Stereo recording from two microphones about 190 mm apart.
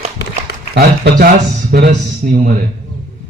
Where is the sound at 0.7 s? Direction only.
55° right (ahead or behind).